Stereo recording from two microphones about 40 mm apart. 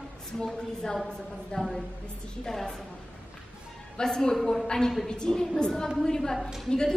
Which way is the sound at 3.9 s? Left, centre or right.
Centre.